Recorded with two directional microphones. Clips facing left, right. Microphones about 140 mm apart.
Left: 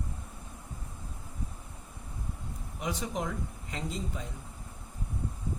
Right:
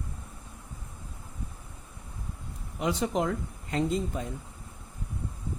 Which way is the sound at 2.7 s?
65° right (ahead or behind).